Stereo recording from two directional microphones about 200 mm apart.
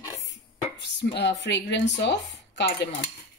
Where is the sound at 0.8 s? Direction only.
60° left (ahead or behind).